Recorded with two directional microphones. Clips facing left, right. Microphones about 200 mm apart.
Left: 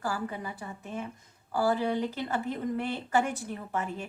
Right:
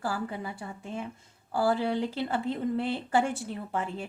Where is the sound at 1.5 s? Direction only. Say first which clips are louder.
Right 1 dB; 30° right (ahead or behind).